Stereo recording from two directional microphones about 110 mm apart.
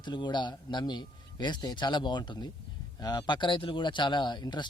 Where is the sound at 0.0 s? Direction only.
45° left (ahead or behind).